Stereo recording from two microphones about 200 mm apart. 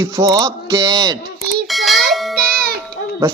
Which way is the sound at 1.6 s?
Centre (ahead or behind).